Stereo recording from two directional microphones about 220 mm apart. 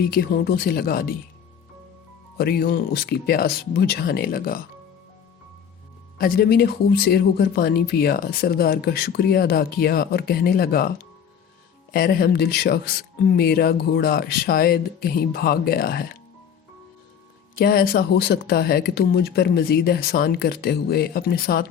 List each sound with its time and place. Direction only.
0.0 s speech: 45° left (ahead or behind)
2.4 s speech: 45° left (ahead or behind)
6.1 s speech: 40° left (ahead or behind)
17.6 s speech: 45° left (ahead or behind)